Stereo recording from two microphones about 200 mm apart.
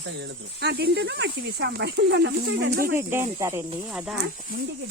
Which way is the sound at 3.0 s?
10° right (ahead or behind).